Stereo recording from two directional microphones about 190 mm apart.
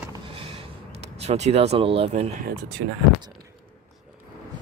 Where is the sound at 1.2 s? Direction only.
35° right (ahead or behind).